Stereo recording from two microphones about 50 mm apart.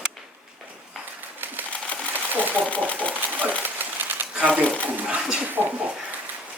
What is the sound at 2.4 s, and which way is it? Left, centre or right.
Typewriter, right.